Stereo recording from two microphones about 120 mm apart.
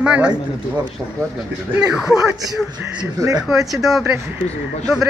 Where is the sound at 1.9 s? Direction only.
5° right (ahead or behind).